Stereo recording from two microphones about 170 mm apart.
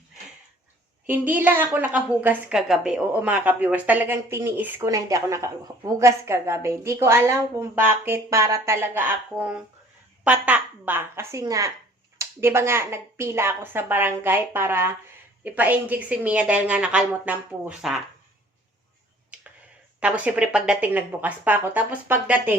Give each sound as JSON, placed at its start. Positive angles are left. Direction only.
{"t": 1.0, "sound": "a woman's voice", "side_deg": -10}
{"t": 20.0, "sound": "a woman's voice", "side_deg": -10}